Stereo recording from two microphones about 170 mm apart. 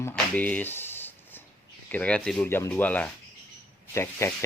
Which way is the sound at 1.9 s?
10° left (ahead or behind).